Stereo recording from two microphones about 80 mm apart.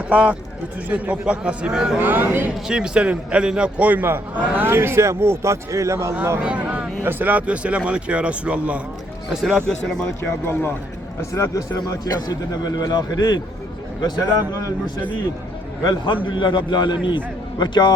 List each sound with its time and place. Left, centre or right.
0.1 s a man's voice: centre
2.0 s a man's voice: right
2.6 s a man's voice: centre; by 6.1 s right
6.4 s a man's voice: centre
9.3 s speech: centre
10.4 s speech: left
11.9 s a man's voice: left
15.8 s a man's voice: left
16.2 s a man's voice: left